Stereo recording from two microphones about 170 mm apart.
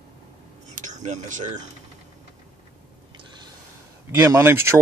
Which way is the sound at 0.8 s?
45° right (ahead or behind).